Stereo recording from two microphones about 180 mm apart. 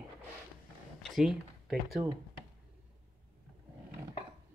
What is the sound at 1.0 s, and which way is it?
Speech, centre (ahead or behind).